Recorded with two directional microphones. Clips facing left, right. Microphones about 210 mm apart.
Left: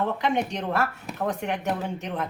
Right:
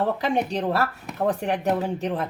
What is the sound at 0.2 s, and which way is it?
Speech, 35° right (ahead or behind).